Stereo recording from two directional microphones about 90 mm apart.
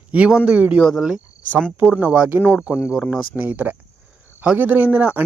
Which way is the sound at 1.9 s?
15° right (ahead or behind).